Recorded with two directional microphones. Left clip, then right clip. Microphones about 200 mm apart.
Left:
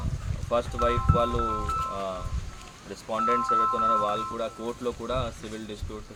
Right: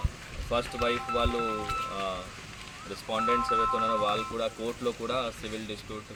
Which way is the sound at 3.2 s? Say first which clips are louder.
Left 3 dB; 30° left (ahead or behind).